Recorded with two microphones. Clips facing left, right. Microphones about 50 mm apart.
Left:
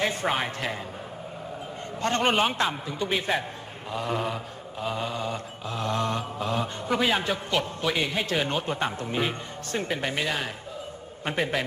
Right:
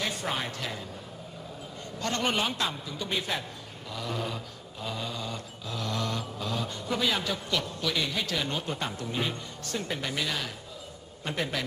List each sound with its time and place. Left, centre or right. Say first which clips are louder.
0.0 s mantra: left 6 dB; left
2.0 s mantra: left 5 dB; left